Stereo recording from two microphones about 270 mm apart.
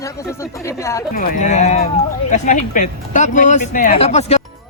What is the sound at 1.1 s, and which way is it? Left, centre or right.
Speech, left.